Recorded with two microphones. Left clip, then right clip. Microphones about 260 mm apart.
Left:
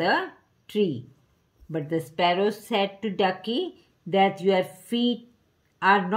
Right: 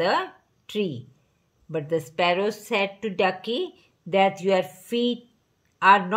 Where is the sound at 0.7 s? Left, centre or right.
Right.